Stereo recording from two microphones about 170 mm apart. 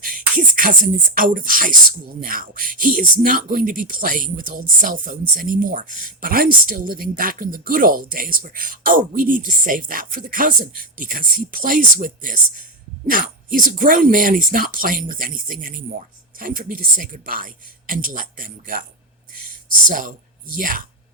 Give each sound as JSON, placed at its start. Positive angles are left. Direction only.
{"t": 0.0, "sound": "beatboxing", "side_deg": -55}
{"t": 1.1, "sound": "speech", "side_deg": -55}
{"t": 19.9, "sound": "speech", "side_deg": -55}